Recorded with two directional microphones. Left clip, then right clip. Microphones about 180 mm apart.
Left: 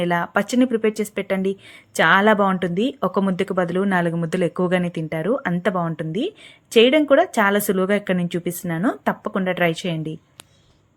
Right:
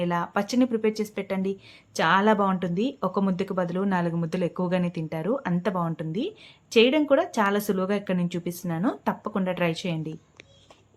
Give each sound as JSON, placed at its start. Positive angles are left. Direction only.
{"t": 0.0, "sound": "speech", "side_deg": 25}